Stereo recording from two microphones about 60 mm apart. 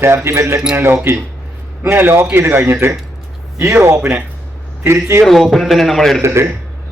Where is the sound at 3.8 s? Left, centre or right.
Right.